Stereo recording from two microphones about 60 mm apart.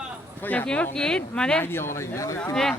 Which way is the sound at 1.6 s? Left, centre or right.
Left.